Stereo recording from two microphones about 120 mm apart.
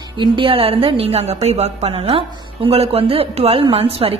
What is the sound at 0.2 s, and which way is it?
A woman's voice, 50° right (ahead or behind).